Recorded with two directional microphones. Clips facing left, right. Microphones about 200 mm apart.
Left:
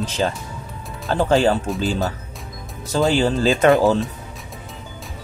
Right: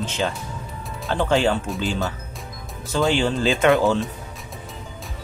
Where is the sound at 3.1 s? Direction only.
40° left (ahead or behind).